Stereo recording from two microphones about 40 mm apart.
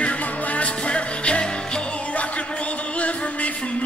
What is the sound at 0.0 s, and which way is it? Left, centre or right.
Music, left.